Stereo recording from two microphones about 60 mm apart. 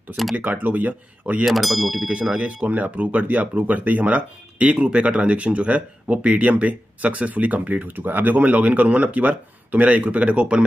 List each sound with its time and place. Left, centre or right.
0.4 s speech: right
1.4 s speech: centre
2.0 s speech: centre